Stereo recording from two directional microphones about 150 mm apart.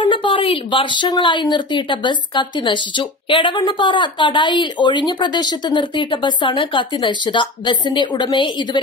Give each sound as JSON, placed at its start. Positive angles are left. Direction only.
{"t": 0.0, "sound": "a woman's voice", "side_deg": 35}